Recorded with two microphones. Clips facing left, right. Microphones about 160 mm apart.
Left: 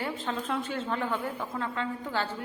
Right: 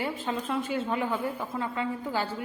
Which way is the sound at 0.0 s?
10° right (ahead or behind).